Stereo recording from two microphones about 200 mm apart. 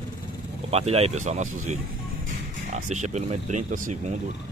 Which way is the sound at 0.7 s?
30° right (ahead or behind).